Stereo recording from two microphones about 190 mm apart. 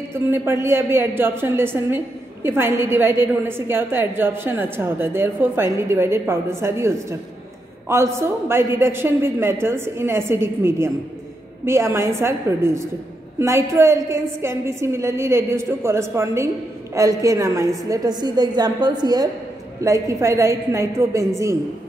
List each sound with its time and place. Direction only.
0.3 s a woman's voice: 15° right (ahead or behind)